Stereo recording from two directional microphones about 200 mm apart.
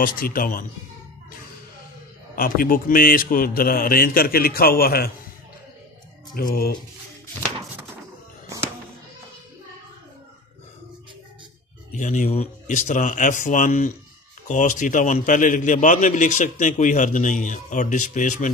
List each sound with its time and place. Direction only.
0.0 s a man's voice: 45° left (ahead or behind)
2.3 s a man's voice: 45° left (ahead or behind)
6.3 s a man's voice: 45° left (ahead or behind)
12.0 s a man's voice: 35° left (ahead or behind)